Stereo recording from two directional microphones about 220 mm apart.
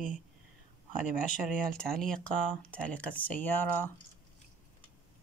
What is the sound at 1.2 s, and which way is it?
Speech, 35° left (ahead or behind).